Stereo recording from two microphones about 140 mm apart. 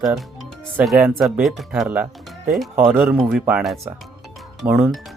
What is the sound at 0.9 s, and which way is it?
Speech, 5° right (ahead or behind).